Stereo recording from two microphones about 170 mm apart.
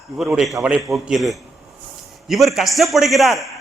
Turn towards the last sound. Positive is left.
turn(degrees=0)  # may be behind; listen again after turning